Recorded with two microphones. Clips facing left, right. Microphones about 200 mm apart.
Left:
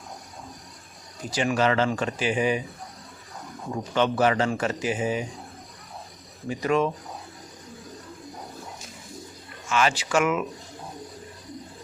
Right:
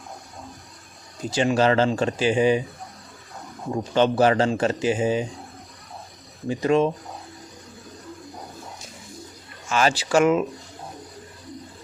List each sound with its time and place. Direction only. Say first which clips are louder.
1.3 s speech: right 4 dB; 30° right (ahead or behind)
3.9 s speech: right 4 dB; 30° right (ahead or behind)
6.5 s speech: right 4 dB; 30° right (ahead or behind)
9.6 s speech: right 2 dB; 35° right (ahead or behind)